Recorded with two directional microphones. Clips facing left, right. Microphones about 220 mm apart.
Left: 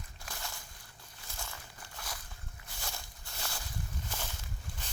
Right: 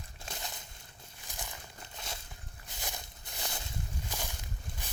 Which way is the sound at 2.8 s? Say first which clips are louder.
Right 2 dB; 20° right (ahead or behind).